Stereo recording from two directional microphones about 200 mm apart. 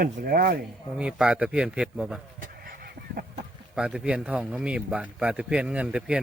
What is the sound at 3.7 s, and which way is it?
A man's voice, 5° right (ahead or behind).